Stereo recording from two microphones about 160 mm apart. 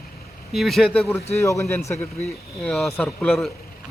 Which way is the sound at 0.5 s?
Centre (ahead or behind).